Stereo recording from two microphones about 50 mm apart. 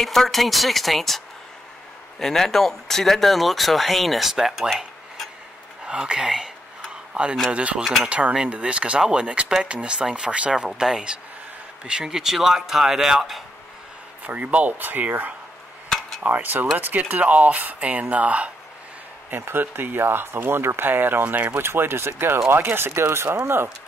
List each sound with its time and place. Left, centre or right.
0.0 s speech: centre
5.9 s a man's voice: centre
7.8 s speech: centre
8.1 s speech: right; by 13.4 s centre
14.2 s speech: right
19.3 s speech: right
21.5 s speech: right